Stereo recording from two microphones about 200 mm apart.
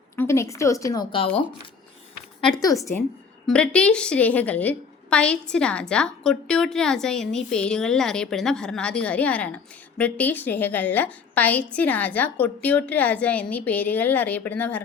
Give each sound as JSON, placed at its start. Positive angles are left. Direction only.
{"t": 0.2, "sound": "a woman's voice", "side_deg": 15}
{"t": 2.4, "sound": "a woman's voice", "side_deg": 15}
{"t": 3.4, "sound": "a woman's voice", "side_deg": 5}